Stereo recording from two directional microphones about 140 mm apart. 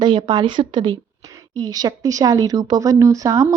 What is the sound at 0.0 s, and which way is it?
Speech, 30° right (ahead or behind).